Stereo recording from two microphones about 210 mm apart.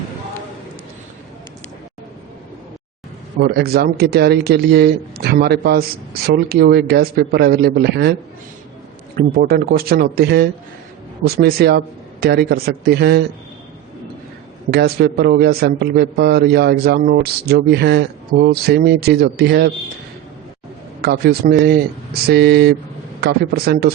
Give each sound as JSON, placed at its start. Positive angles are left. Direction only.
{"t": 3.4, "sound": "a man's voice", "side_deg": -50}
{"t": 9.1, "sound": "a man's voice", "side_deg": -45}
{"t": 14.7, "sound": "a man's voice", "side_deg": -50}
{"t": 21.0, "sound": "a man's voice", "side_deg": -50}